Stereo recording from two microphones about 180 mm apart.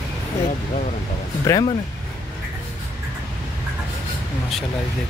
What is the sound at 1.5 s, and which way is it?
Speech, 20° left (ahead or behind).